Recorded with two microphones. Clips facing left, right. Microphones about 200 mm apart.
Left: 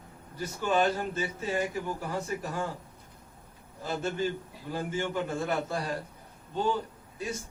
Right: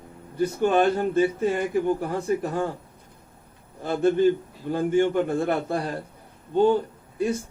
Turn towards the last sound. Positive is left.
turn(degrees=-55)  # may be behind; listen again after turning